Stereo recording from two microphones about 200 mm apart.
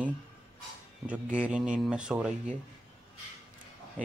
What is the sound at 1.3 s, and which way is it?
Speech, 5° right (ahead or behind).